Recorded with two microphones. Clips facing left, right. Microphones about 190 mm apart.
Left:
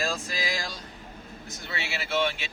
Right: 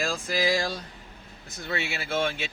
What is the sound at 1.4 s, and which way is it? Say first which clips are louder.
Speech: right 6 dB; 55° right (ahead or behind).